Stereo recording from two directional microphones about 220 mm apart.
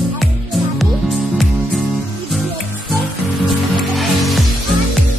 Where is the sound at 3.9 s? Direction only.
Centre (ahead or behind).